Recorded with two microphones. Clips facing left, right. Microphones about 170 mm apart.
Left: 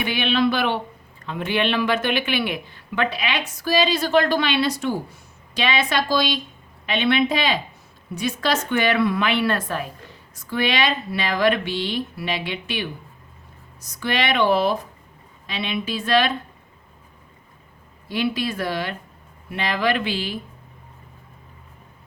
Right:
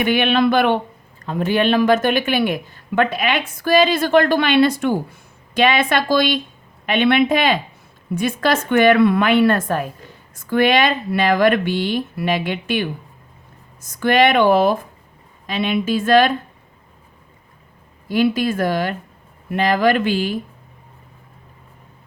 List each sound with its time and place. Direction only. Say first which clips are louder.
0.0 s speech: right 5 dB; 55° right (ahead or behind)
1.2 s speech: right 5 dB; 40° right (ahead or behind)
18.1 s speech: right 6 dB; 45° right (ahead or behind)